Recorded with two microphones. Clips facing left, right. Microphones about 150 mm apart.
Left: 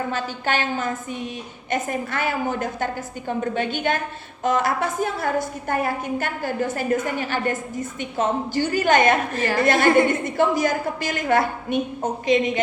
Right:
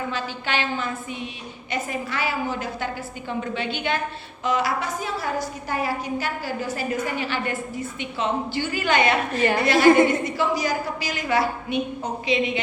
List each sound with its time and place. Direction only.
0.1 s a woman's voice: 45° left (ahead or behind)